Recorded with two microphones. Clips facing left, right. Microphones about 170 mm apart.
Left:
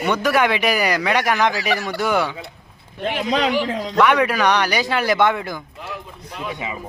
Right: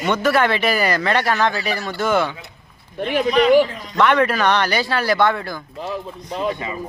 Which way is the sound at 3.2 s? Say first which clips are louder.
Right 7 dB; 90° left.